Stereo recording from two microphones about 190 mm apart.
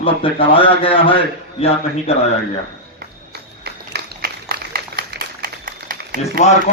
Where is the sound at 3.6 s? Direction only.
55° right (ahead or behind).